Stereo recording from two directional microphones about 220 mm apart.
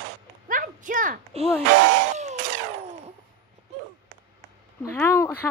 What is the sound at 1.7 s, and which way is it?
Speech, 55° right (ahead or behind).